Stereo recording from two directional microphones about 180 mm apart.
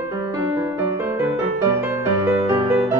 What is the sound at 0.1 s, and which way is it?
Music, 15° right (ahead or behind).